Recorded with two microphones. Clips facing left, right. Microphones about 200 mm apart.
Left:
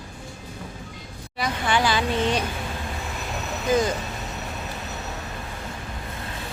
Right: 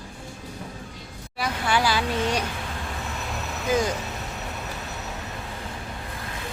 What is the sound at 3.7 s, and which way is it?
Speech, 10° right (ahead or behind).